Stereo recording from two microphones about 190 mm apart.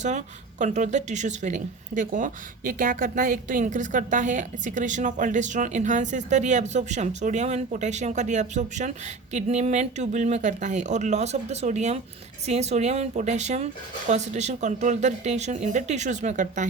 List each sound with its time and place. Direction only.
0.0 s speech: 40° right (ahead or behind)